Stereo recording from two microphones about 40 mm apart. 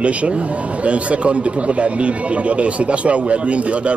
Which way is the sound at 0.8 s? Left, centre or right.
Right.